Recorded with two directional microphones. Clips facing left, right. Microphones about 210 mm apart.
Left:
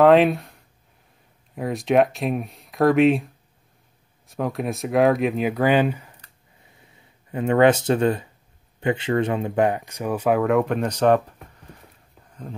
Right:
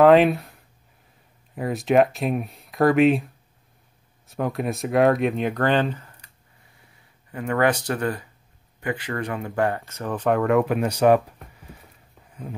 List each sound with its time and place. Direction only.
0.0 s speech: centre (ahead or behind)
4.3 s speech: centre (ahead or behind)
7.2 s speech: 25° left (ahead or behind); by 11.3 s 10° right (ahead or behind)
11.5 s a sound: 5° right (ahead or behind)